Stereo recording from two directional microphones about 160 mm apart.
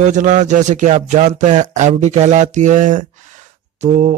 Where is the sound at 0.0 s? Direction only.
50° right (ahead or behind).